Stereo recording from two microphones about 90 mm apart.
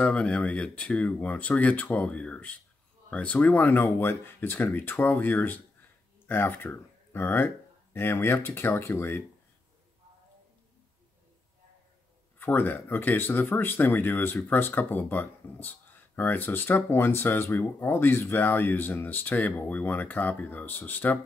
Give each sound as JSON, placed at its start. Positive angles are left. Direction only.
{"t": 0.0, "sound": "speech", "side_deg": 15}
{"t": 12.4, "sound": "speech", "side_deg": 20}